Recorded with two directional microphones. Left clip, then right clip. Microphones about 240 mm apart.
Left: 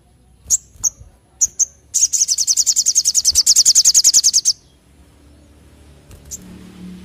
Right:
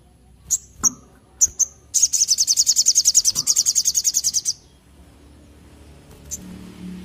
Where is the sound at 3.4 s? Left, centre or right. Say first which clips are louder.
Left 8 dB; left.